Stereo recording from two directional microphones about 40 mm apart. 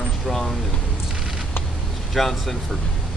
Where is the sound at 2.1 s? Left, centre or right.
Centre.